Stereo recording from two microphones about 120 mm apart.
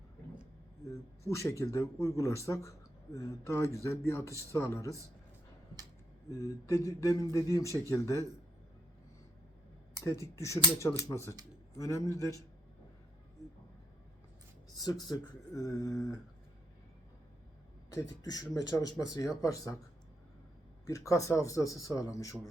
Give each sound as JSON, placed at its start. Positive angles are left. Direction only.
{"t": 1.3, "sound": "speech", "side_deg": 25}
{"t": 6.4, "sound": "speech", "side_deg": 25}
{"t": 10.2, "sound": "speech", "side_deg": 25}
{"t": 14.8, "sound": "speech", "side_deg": 35}
{"t": 17.9, "sound": "speech", "side_deg": 30}
{"t": 20.8, "sound": "speech", "side_deg": 25}